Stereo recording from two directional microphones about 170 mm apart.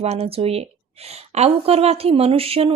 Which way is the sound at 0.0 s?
35° right (ahead or behind).